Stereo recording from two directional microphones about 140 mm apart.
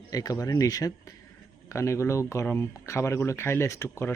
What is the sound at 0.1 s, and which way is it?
Speech, 25° left (ahead or behind).